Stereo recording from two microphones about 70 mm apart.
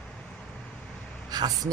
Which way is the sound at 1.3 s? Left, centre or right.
Right.